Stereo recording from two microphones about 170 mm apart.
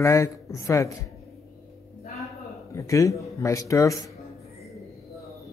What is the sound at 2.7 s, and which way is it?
Speech, 20° left (ahead or behind).